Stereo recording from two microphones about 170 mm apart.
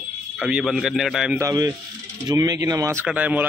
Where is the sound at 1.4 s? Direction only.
20° right (ahead or behind).